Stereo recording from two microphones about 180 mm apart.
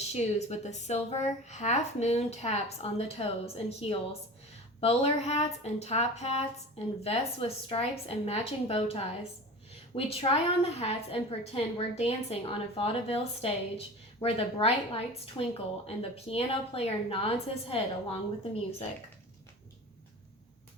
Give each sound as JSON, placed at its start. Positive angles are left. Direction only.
{"t": 0.1, "sound": "a woman's voice", "side_deg": 35}